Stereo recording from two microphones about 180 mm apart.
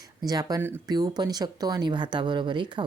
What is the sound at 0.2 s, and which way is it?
Speech, 20° right (ahead or behind).